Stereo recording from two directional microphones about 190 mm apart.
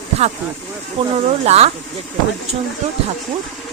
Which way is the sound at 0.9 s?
35° right (ahead or behind).